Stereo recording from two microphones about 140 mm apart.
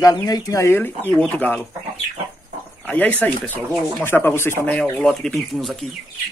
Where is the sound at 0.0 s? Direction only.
25° left (ahead or behind); by 1.6 s 10° left (ahead or behind).